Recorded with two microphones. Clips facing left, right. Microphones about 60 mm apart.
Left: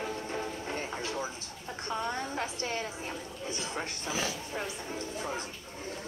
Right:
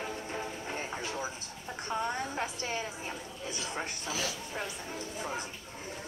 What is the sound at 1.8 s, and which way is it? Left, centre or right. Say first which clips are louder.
Speech: even; centre.